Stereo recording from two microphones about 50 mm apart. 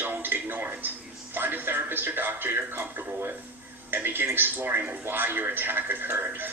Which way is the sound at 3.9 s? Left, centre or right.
Right.